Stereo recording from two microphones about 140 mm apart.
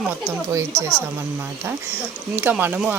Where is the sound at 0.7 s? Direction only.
10° left (ahead or behind).